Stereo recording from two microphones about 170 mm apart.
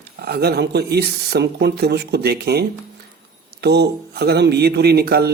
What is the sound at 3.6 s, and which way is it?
Speech, 75° right (ahead or behind).